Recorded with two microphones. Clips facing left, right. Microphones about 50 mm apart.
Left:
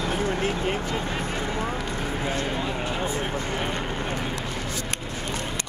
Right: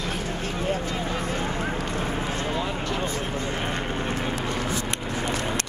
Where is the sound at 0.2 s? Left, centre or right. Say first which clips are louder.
Left 4 dB; left.